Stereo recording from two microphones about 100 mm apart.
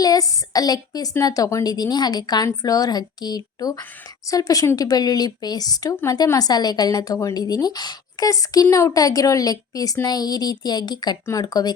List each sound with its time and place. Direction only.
0.0 s a woman's voice: 35° left (ahead or behind)